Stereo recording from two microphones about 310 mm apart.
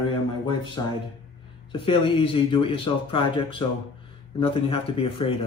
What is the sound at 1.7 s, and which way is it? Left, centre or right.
Speech, centre.